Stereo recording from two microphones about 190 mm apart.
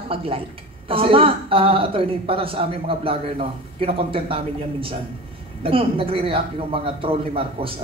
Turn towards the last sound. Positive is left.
turn(degrees=-30)  # may be behind; listen again after turning